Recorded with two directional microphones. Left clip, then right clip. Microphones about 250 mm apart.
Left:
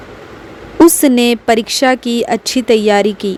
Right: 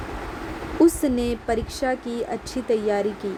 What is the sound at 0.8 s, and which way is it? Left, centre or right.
A woman's voice, left.